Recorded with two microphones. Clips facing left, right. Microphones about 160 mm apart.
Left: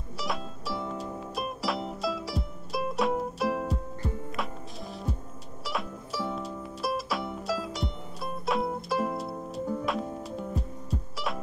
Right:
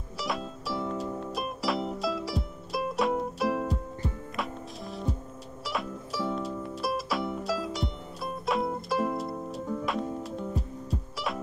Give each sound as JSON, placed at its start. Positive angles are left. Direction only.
{"t": 0.2, "sound": "music", "side_deg": 0}